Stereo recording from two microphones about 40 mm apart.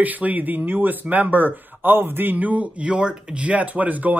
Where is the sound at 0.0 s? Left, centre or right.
Right.